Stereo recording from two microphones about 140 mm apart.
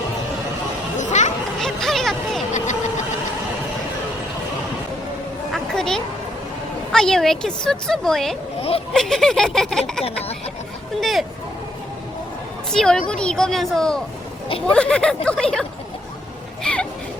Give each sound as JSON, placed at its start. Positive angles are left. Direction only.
{"t": 0.9, "sound": "chatter", "side_deg": 60}
{"t": 1.5, "sound": "vehicle", "side_deg": 0}
{"t": 2.5, "sound": "a sound", "side_deg": 60}
{"t": 5.5, "sound": "a sound", "side_deg": 5}
{"t": 6.9, "sound": "a woman's voice", "side_deg": 5}
{"t": 10.0, "sound": "speech", "side_deg": 45}
{"t": 11.0, "sound": "a woman's voice", "side_deg": 0}
{"t": 12.7, "sound": "a woman's voice", "side_deg": 5}
{"t": 16.7, "sound": "a sound", "side_deg": 5}